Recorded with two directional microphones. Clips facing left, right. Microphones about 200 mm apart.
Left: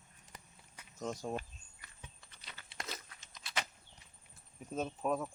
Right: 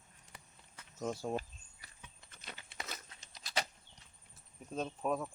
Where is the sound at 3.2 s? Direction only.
35° right (ahead or behind).